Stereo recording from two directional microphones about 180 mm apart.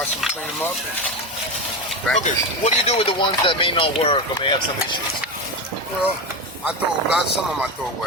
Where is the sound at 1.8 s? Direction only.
Centre (ahead or behind).